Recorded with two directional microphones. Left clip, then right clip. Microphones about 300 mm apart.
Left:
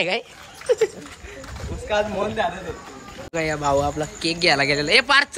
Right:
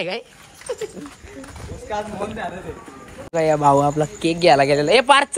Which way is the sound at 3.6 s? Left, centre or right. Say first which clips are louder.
Right 3 dB; centre.